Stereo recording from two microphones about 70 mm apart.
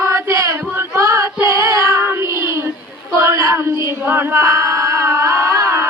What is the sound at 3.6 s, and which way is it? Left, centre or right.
Female singing, right.